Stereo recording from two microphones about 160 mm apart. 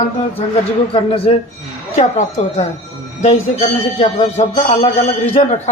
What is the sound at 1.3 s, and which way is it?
Speech, 45° left (ahead or behind).